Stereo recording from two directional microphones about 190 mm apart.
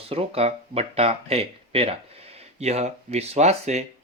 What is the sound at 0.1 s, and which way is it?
Speech, 30° right (ahead or behind).